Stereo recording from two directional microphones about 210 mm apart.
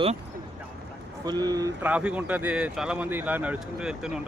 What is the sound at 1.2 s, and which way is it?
Speech, 20° right (ahead or behind).